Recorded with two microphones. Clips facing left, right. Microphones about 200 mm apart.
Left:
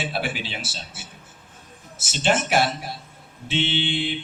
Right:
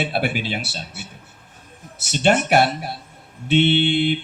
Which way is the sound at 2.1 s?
60° right (ahead or behind).